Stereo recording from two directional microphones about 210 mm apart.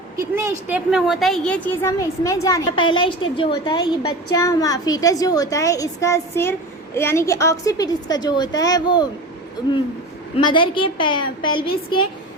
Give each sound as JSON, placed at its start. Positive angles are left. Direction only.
{"t": 0.2, "sound": "speech", "side_deg": -15}
{"t": 0.9, "sound": "a woman's voice", "side_deg": 0}
{"t": 10.3, "sound": "a woman's voice", "side_deg": 25}